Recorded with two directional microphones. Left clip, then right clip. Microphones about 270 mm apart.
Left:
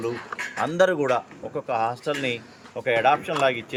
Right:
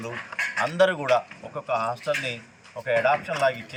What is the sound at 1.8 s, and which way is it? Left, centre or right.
Speech, centre.